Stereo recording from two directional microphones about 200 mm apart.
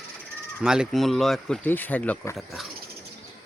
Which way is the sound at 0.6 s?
5° right (ahead or behind).